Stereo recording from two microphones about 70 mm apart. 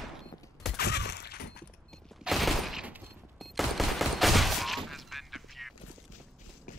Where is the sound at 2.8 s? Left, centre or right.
Right.